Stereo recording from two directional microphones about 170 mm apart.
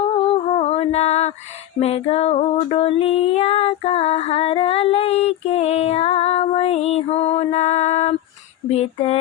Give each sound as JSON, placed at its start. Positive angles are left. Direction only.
{"t": 0.5, "sound": "female singing", "side_deg": 35}